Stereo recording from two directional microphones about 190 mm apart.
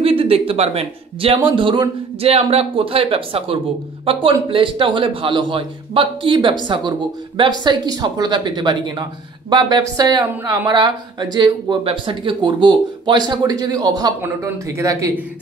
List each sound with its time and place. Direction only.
0.0 s speech: 30° right (ahead or behind)